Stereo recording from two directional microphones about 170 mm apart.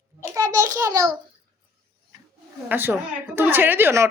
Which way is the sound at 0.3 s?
20° right (ahead or behind).